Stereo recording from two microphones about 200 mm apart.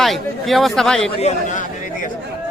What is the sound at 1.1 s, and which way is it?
Speech, 35° left (ahead or behind).